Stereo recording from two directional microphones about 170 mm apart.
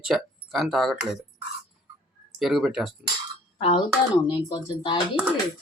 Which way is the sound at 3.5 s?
35° left (ahead or behind).